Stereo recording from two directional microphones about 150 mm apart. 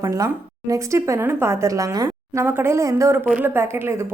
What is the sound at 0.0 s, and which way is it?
A woman's voice, 20° right (ahead or behind).